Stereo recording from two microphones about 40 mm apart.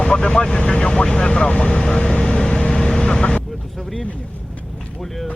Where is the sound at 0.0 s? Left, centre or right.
Centre.